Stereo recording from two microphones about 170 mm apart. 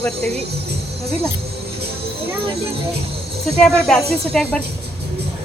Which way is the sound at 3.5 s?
5° left (ahead or behind).